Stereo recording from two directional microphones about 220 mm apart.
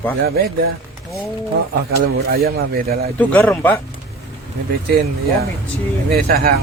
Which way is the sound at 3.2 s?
5° left (ahead or behind).